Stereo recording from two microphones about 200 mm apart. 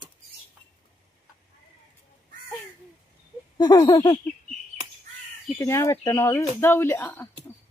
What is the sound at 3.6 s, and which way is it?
Speech, 20° left (ahead or behind).